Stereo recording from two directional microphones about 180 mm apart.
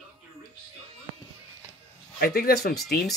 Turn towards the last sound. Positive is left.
turn(degrees=60)  # may be behind; listen again after turning